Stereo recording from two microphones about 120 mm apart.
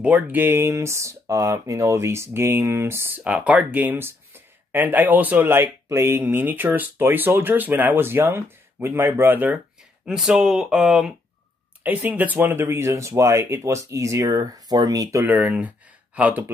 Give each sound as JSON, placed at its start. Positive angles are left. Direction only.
{"t": 0.0, "sound": "speech", "side_deg": -10}
{"t": 10.0, "sound": "speech", "side_deg": -5}
{"t": 15.3, "sound": "speech", "side_deg": -10}